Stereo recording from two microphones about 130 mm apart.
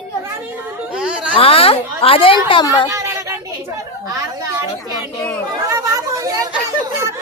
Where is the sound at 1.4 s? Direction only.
45° left (ahead or behind).